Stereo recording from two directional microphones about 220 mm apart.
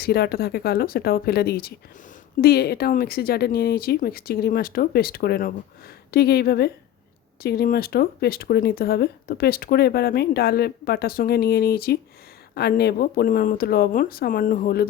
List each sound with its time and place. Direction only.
0.0 s speech: 45° left (ahead or behind)